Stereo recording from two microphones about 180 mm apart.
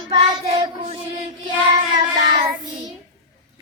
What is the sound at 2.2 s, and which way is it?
Child singing, 25° right (ahead or behind).